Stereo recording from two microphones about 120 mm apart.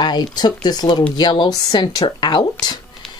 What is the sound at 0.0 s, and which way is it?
Speech, 35° left (ahead or behind).